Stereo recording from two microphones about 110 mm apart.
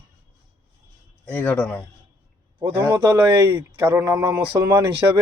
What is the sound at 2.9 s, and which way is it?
A man's voice, 25° right (ahead or behind).